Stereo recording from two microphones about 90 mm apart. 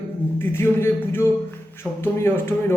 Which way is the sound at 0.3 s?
25° left (ahead or behind).